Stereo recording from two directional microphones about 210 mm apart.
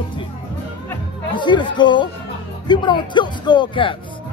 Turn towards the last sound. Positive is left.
turn(degrees=20)  # may be behind; listen again after turning